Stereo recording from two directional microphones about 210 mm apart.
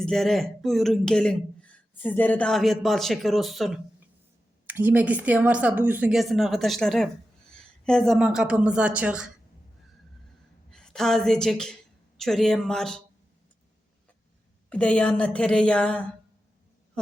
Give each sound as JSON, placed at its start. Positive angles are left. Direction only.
{"t": 0.0, "sound": "speech", "side_deg": 0}
{"t": 10.7, "sound": "a woman's voice", "side_deg": 5}
{"t": 14.7, "sound": "speech", "side_deg": 5}